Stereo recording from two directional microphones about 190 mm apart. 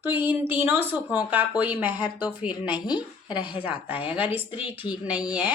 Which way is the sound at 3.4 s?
25° left (ahead or behind).